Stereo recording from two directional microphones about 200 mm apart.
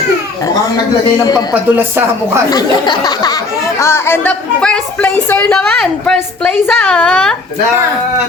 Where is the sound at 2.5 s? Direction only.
20° left (ahead or behind).